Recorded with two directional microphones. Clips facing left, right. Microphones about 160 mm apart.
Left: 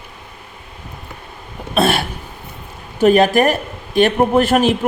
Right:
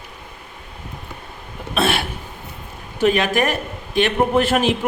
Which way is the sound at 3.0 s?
40° left (ahead or behind).